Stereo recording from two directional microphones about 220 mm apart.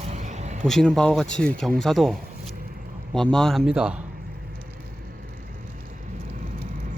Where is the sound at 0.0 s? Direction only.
30° right (ahead or behind).